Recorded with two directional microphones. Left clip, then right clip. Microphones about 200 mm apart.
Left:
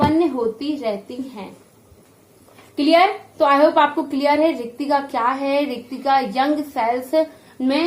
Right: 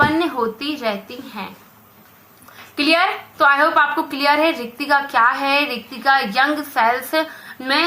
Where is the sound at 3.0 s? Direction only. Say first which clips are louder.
Left 1 dB; 20° right (ahead or behind).